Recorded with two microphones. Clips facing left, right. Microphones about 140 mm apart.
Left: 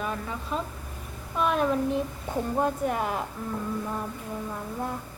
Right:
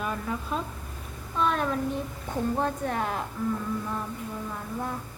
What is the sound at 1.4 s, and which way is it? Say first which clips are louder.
A woman's voice: left 2 dB; 15° left (ahead or behind).